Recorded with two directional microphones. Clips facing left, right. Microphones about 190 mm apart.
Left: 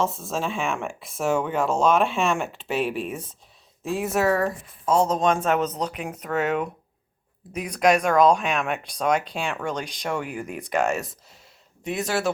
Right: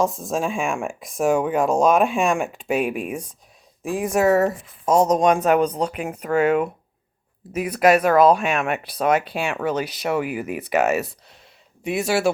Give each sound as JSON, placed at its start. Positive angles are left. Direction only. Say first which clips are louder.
{"t": 0.1, "sound": "speech", "louder": "right 4 dB", "side_deg": -15}
{"t": 4.2, "sound": "speech", "louder": "right 6 dB", "side_deg": -25}